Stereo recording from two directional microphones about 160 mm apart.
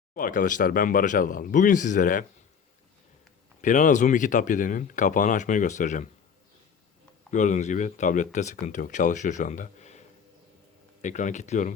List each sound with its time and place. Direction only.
0.1 s speech: 60° left (ahead or behind)
3.6 s speech: 50° left (ahead or behind)
7.3 s speech: 50° left (ahead or behind)
11.0 s speech: 50° left (ahead or behind)